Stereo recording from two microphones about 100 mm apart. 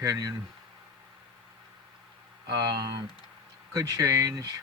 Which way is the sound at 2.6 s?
40° right (ahead or behind).